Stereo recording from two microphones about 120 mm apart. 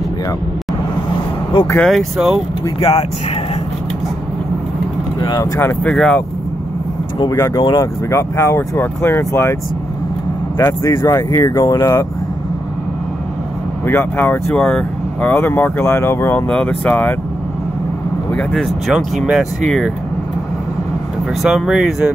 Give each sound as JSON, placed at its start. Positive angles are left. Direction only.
{"t": 1.8, "sound": "speech", "side_deg": 0}
{"t": 2.8, "sound": "speech", "side_deg": 55}
{"t": 5.2, "sound": "speech", "side_deg": 35}
{"t": 5.6, "sound": "speech", "side_deg": 15}
{"t": 5.9, "sound": "speech", "side_deg": 5}
{"t": 7.2, "sound": "speech", "side_deg": 30}
{"t": 10.6, "sound": "speech", "side_deg": 20}
{"t": 13.8, "sound": "speech", "side_deg": 15}
{"t": 14.6, "sound": "speech", "side_deg": 5}
{"t": 15.3, "sound": "speech", "side_deg": 15}
{"t": 18.5, "sound": "speech", "side_deg": 0}
{"t": 21.4, "sound": "speech", "side_deg": 0}